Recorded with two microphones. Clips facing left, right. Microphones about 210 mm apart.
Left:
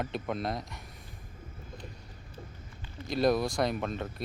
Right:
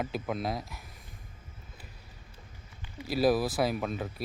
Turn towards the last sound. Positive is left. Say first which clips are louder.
# right 1 dB
turn(degrees=-5)  # may be behind; listen again after turning